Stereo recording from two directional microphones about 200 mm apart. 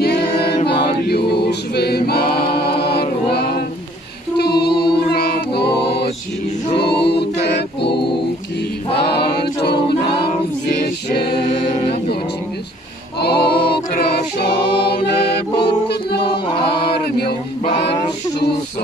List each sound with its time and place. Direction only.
0.0 s choir: 55° left (ahead or behind)
0.8 s a capella: 50° left (ahead or behind)
11.1 s a capella: 55° left (ahead or behind)
11.4 s music: 35° left (ahead or behind)
13.2 s a capella: 55° left (ahead or behind)
15.0 s music: 30° left (ahead or behind)
17.6 s female singing: 25° left (ahead or behind)